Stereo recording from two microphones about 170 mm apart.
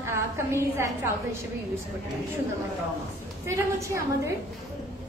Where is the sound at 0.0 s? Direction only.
15° right (ahead or behind).